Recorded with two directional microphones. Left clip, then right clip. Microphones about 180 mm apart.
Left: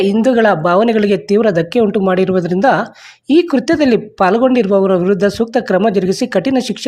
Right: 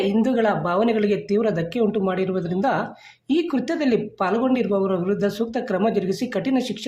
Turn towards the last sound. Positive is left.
turn(degrees=45)  # may be behind; listen again after turning